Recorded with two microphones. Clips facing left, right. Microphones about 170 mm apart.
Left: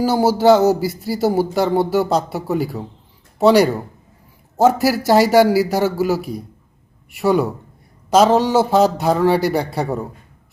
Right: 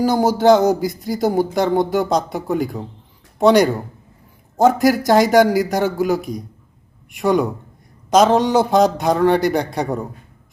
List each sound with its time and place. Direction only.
0.0 s speech: 5° left (ahead or behind)